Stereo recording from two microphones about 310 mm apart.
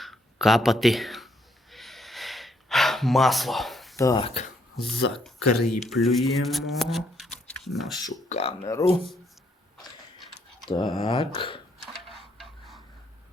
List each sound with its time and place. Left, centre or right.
0.0 s a sound: centre
4.0 s speech: centre
5.1 s speech: centre
8.0 s speech: centre
10.7 s speech: centre
12.0 s tick-tock: centre